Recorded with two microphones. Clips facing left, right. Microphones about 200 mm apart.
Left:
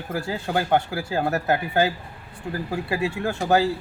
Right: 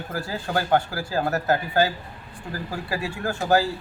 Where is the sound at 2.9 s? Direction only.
25° left (ahead or behind).